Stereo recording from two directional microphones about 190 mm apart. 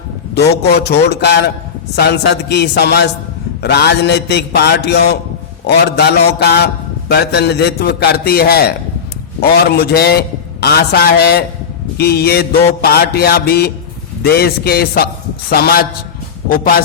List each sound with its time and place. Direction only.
0.3 s a man's voice: 60° left (ahead or behind)